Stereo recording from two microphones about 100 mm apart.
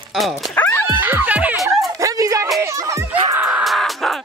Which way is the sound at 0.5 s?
20° left (ahead or behind).